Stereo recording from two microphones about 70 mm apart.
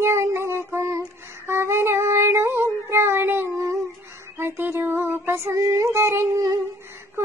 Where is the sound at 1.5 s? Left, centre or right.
Right.